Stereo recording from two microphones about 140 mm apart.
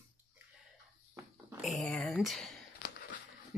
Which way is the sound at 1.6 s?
Centre (ahead or behind).